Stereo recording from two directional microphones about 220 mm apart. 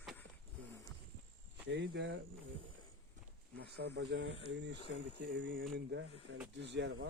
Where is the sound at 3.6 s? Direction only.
50° right (ahead or behind).